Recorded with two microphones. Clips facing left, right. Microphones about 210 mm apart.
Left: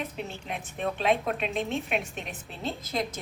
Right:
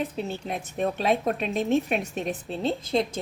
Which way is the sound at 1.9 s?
Centre (ahead or behind).